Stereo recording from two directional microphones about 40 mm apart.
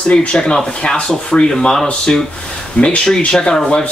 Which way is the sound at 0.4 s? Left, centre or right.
Centre.